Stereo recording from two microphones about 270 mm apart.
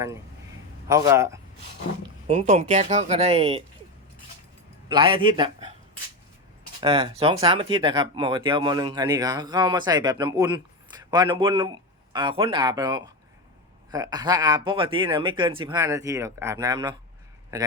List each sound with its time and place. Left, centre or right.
0.9 s speech: centre
2.2 s speech: right
4.9 s speech: centre
6.8 s a man's voice: right